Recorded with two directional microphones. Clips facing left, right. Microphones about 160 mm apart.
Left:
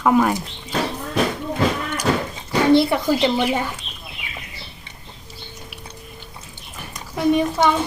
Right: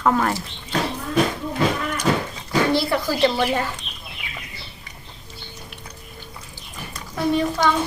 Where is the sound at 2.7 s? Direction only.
20° left (ahead or behind).